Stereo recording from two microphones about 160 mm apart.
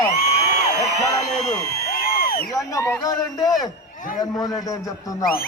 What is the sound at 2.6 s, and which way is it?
A man's voice, 15° left (ahead or behind).